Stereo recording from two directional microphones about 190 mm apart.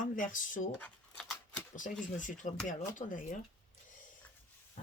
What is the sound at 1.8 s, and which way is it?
Speech, 45° left (ahead or behind).